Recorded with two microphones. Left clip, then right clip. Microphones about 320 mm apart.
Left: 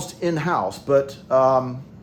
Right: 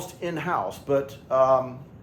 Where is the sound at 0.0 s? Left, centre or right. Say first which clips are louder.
Left 6 dB; left.